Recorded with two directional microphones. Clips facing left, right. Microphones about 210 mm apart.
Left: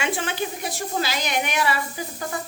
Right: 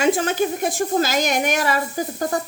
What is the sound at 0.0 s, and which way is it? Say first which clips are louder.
A woman's voice: right 8 dB; 40° right (ahead or behind).